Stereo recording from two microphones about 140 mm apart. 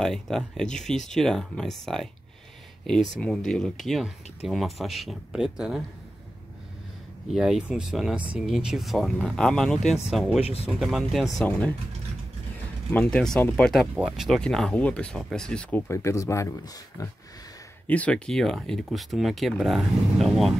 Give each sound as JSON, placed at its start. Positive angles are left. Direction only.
{"t": 0.0, "sound": "speech", "side_deg": 5}
{"t": 3.2, "sound": "speech", "side_deg": 5}
{"t": 7.2, "sound": "speech", "side_deg": -5}
{"t": 10.4, "sound": "speech", "side_deg": 45}
{"t": 10.8, "sound": "speech", "side_deg": 0}
{"t": 11.4, "sound": "speech", "side_deg": 10}
{"t": 12.9, "sound": "speech", "side_deg": 10}
{"t": 15.9, "sound": "speech", "side_deg": 20}
{"t": 17.8, "sound": "speech", "side_deg": 10}